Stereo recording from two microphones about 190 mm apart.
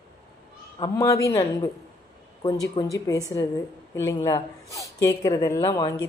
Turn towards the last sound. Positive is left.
turn(degrees=20)  # may be behind; listen again after turning